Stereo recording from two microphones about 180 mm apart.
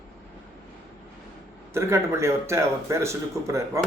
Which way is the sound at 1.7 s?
15° right (ahead or behind).